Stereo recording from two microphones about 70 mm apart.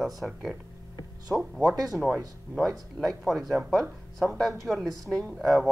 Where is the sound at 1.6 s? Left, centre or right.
Right.